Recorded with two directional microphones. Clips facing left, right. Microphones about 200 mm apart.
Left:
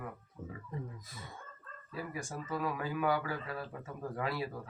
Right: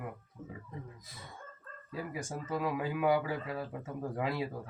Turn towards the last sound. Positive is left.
turn(degrees=-15)  # may be behind; listen again after turning